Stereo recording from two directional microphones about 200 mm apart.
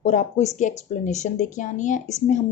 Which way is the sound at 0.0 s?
35° left (ahead or behind).